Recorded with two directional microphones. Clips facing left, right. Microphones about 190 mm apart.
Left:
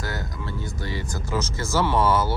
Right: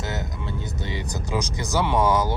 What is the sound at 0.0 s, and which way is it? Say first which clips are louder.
Music: right 1 dB; 20° right (ahead or behind).